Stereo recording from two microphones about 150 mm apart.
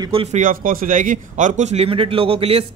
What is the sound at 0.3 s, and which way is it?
A man's voice, 65° right (ahead or behind).